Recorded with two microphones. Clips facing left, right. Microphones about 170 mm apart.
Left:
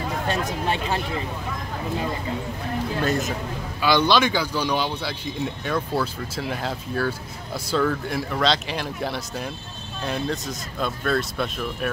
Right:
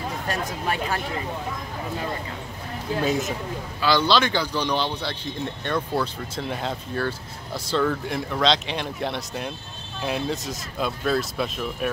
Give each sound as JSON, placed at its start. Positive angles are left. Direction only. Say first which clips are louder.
{"t": 0.3, "sound": "speech", "louder": "left 2 dB", "side_deg": 25}
{"t": 3.0, "sound": "speech", "louder": "right 1 dB", "side_deg": -5}
{"t": 3.8, "sound": "speech", "louder": "left 1 dB", "side_deg": 15}